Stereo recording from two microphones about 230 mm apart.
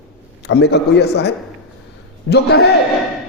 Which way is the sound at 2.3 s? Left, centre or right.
Left.